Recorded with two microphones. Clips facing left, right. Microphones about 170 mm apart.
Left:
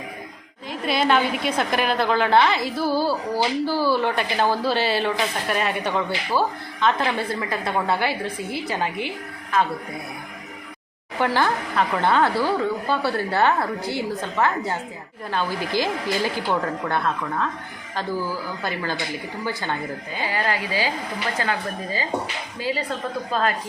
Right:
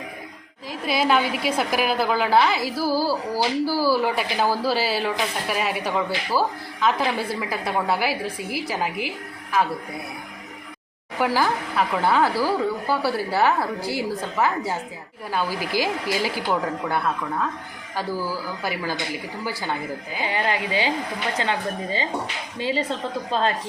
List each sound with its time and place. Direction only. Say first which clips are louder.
0.7 s a woman's voice: left 1 dB; 5° right (ahead or behind)
11.2 s a woman's voice: even; 5° right (ahead or behind)
20.2 s a woman's voice: right 1 dB; 20° right (ahead or behind)